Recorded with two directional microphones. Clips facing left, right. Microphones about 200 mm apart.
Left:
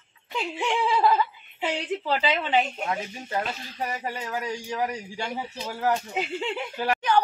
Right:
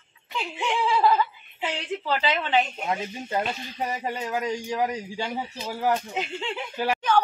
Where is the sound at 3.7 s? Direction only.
15° right (ahead or behind).